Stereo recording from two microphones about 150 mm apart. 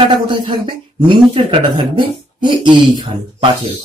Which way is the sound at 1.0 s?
35° right (ahead or behind).